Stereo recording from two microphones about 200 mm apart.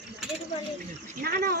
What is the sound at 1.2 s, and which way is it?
Speech, 50° right (ahead or behind).